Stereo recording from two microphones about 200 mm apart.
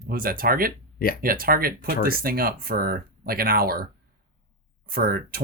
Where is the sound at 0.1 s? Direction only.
45° right (ahead or behind).